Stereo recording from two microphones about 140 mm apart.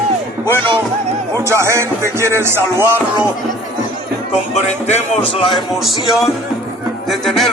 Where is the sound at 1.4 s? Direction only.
20° right (ahead or behind).